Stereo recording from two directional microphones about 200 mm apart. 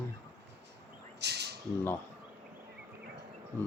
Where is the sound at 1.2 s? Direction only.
55° right (ahead or behind).